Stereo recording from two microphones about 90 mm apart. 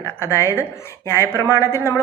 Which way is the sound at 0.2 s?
30° left (ahead or behind).